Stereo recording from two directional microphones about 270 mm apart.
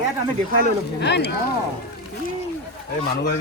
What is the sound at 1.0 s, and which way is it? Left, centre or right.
Speech, left.